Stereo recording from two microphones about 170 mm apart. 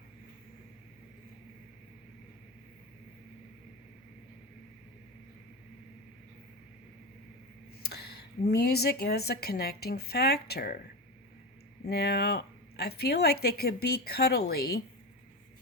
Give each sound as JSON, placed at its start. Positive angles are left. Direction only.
{"t": 7.8, "sound": "a sound", "side_deg": 70}
{"t": 8.4, "sound": "speech", "side_deg": 70}
{"t": 11.9, "sound": "speech", "side_deg": 70}